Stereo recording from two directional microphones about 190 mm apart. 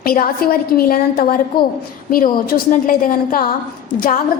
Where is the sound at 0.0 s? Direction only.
50° left (ahead or behind).